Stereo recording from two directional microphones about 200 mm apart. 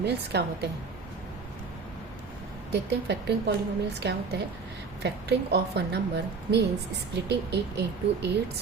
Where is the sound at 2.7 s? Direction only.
60° right (ahead or behind).